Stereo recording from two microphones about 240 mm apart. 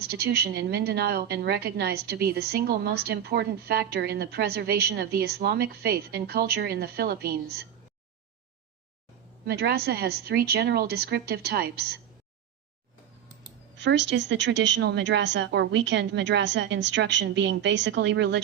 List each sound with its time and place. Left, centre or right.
0.0 s a woman's voice: right
9.5 s a woman's voice: right
13.7 s a woman's voice: right